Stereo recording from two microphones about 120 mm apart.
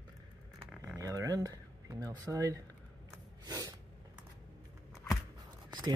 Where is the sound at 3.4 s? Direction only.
35° right (ahead or behind).